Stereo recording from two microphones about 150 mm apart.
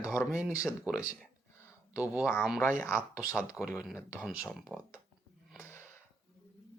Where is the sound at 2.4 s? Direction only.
Centre (ahead or behind).